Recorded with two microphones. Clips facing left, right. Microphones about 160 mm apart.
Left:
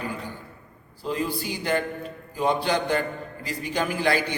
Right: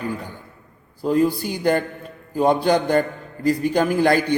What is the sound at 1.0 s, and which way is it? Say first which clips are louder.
A man's voice: right 9 dB; 45° right (ahead or behind).